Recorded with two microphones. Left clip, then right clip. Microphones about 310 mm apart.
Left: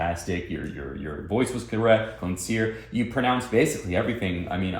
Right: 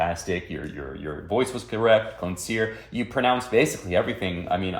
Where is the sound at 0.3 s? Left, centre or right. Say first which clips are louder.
Right 1 dB; right.